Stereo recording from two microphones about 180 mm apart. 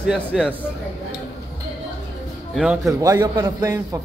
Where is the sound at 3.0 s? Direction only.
20° right (ahead or behind).